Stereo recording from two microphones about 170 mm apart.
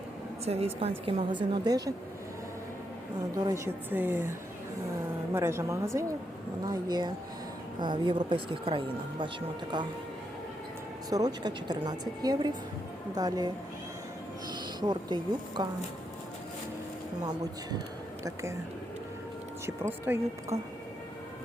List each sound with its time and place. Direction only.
0.4 s speech: 35° right (ahead or behind)
3.3 s a woman's voice: 20° right (ahead or behind)
11.1 s a woman's voice: 25° right (ahead or behind)
14.8 s a woman's voice: 25° right (ahead or behind)
17.2 s a woman's voice: 25° right (ahead or behind)
19.6 s a woman's voice: 15° right (ahead or behind)